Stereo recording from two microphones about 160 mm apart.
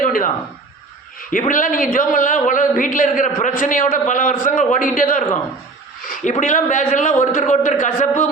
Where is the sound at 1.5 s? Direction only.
55° left (ahead or behind).